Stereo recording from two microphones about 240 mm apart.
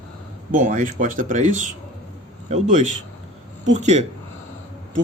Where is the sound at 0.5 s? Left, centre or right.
Right.